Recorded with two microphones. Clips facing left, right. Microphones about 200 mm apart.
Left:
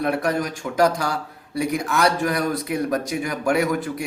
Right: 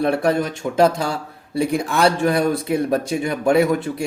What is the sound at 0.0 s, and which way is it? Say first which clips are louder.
Speech: right 4 dB; 30° right (ahead or behind).